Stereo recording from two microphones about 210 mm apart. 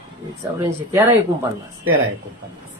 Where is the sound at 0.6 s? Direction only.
15° right (ahead or behind).